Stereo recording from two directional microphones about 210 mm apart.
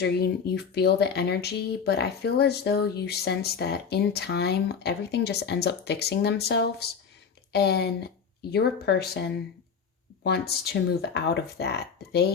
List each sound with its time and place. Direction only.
0.0 s speech: 50° left (ahead or behind)
10.2 s speech: 50° left (ahead or behind)